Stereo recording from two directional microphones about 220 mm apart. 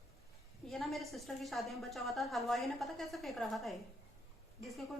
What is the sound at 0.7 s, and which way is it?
A woman's voice, centre (ahead or behind).